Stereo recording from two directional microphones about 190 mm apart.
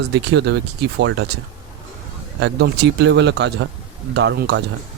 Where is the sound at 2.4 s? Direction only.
65° right (ahead or behind).